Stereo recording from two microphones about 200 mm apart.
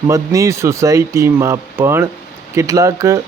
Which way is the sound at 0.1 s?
15° right (ahead or behind).